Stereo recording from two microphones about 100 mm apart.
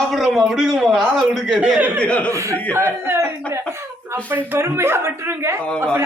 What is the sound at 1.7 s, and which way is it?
Speech, 15° right (ahead or behind).